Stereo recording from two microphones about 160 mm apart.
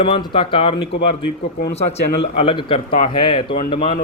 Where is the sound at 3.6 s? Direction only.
50° left (ahead or behind).